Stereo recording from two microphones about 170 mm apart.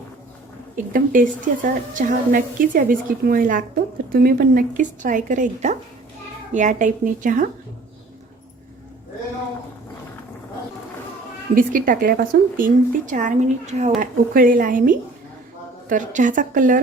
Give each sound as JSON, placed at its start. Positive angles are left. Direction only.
{"t": 0.9, "sound": "a woman's voice", "side_deg": -55}
{"t": 11.5, "sound": "a woman's voice", "side_deg": -55}